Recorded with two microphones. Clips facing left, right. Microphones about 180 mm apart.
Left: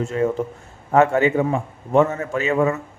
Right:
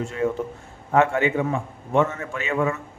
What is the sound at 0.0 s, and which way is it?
A man's voice, 40° left (ahead or behind).